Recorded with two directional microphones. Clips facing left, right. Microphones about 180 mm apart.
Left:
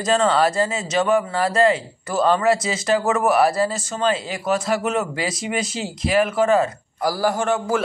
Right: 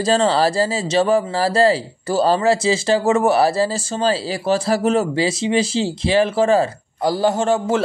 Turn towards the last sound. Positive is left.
turn(degrees=-25)  # may be behind; listen again after turning